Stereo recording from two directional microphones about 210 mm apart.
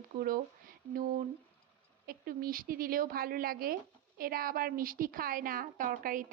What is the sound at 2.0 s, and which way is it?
A woman's voice, 45° right (ahead or behind).